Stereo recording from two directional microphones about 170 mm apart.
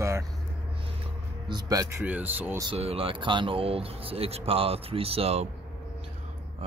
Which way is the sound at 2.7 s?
35° right (ahead or behind).